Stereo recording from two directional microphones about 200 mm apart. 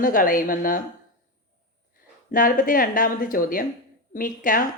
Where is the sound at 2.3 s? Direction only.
45° left (ahead or behind).